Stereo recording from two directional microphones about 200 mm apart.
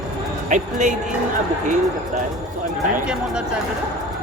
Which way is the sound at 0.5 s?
40° right (ahead or behind).